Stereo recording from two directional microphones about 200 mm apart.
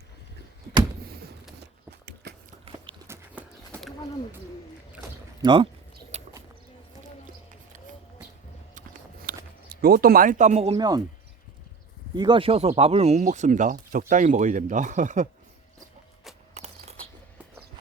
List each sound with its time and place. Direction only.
1.0 s a sound: 50° right (ahead or behind)
3.1 s clip-clop: 10° right (ahead or behind)
4.9 s boat: 20° right (ahead or behind)
6.1 s a sound: 30° right (ahead or behind)
8.7 s biting: 45° right (ahead or behind)
9.6 s speech: 50° right (ahead or behind)
10.8 s speech: 20° right (ahead or behind)
12.1 s speech: 20° right (ahead or behind); by 15.3 s 40° right (ahead or behind)
16.6 s a sound: 30° right (ahead or behind)